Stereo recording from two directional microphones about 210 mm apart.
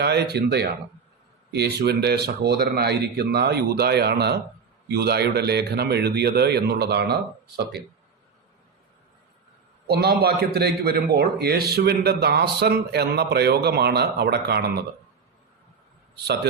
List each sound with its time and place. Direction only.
0.0 s a man's voice: 50° right (ahead or behind)
9.8 s a man's voice: 50° right (ahead or behind)
16.1 s a man's voice: 50° right (ahead or behind)